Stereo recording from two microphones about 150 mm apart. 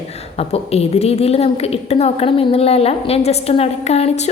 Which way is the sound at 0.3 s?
40° left (ahead or behind).